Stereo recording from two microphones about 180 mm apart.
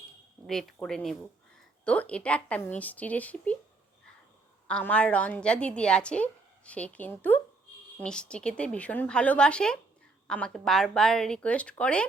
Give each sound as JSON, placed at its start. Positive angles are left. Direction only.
{"t": 0.4, "sound": "a woman's voice", "side_deg": 0}
{"t": 4.7, "sound": "a woman's voice", "side_deg": 5}